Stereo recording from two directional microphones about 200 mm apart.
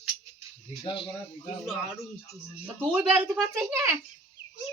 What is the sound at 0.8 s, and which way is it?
Speech, 25° left (ahead or behind).